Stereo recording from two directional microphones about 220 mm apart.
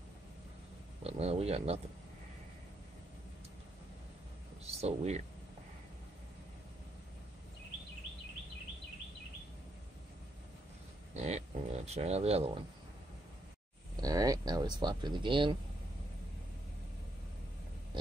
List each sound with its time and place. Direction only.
1.0 s speech: 25° right (ahead or behind)
4.6 s speech: 30° right (ahead or behind)
11.2 s speech: 30° right (ahead or behind)
14.0 s speech: 15° right (ahead or behind)